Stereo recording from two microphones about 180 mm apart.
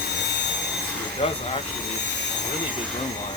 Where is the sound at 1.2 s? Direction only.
35° left (ahead or behind).